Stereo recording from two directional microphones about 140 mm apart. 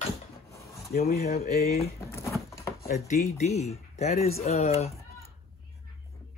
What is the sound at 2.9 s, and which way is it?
Speech, 90° left.